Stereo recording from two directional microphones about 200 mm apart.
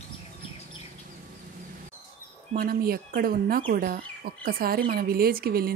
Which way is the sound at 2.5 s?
50° right (ahead or behind).